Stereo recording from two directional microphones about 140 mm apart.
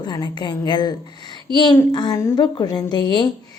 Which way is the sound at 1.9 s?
30° left (ahead or behind).